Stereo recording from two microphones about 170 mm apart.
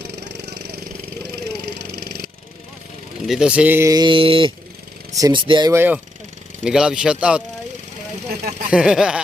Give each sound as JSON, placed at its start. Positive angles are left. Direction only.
{"t": 0.0, "sound": "vehicle", "side_deg": -85}
{"t": 3.2, "sound": "speech", "side_deg": -5}
{"t": 5.7, "sound": "speech", "side_deg": -10}
{"t": 8.7, "sound": "speech", "side_deg": -5}